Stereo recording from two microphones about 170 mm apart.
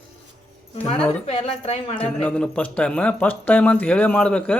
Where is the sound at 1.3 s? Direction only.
35° left (ahead or behind).